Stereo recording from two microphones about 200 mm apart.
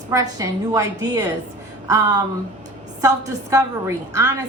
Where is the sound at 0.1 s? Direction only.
15° right (ahead or behind).